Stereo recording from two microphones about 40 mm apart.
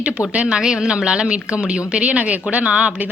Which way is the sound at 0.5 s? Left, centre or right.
Centre.